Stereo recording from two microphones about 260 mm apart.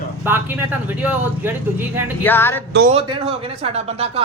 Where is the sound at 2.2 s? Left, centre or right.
Centre.